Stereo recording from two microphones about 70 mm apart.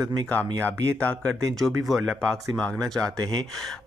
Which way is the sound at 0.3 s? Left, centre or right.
Left.